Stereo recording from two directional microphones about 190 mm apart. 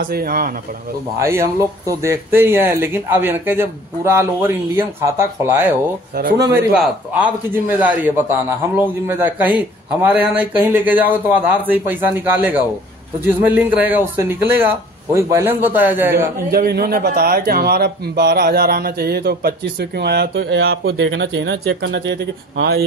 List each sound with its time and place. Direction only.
0.0 s speech: 50° right (ahead or behind)
1.2 s a man's voice: 15° right (ahead or behind)
6.1 s speech: 50° right (ahead or behind)
6.7 s a man's voice: 5° right (ahead or behind)
16.4 s a man's voice: 55° right (ahead or behind)